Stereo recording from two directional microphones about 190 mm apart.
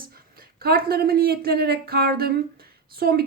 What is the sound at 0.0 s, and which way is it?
Speech, 50° right (ahead or behind).